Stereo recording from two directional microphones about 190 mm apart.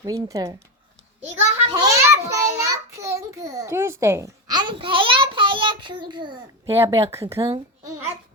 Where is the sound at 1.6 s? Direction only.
30° right (ahead or behind).